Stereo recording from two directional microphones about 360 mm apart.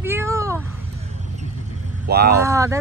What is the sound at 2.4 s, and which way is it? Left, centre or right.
Speech, centre.